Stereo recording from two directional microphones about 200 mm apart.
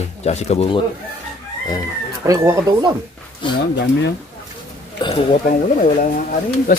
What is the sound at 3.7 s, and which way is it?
Speech, 60° left (ahead or behind).